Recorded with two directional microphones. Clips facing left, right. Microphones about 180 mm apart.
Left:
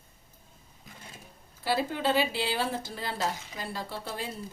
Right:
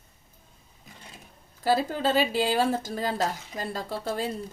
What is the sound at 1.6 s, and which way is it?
Speech, 45° right (ahead or behind).